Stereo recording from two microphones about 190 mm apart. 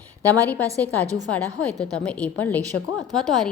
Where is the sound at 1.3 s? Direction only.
5° left (ahead or behind).